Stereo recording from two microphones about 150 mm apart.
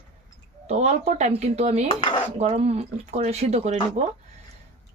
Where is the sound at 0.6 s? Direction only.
45° right (ahead or behind).